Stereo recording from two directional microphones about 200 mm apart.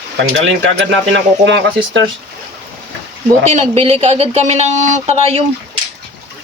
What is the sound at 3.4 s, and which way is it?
Speech, 35° right (ahead or behind).